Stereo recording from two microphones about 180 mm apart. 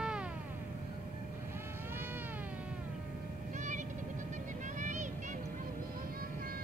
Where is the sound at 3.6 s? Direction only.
40° right (ahead or behind).